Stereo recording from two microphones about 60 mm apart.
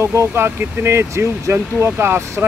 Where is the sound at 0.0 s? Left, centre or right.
Right.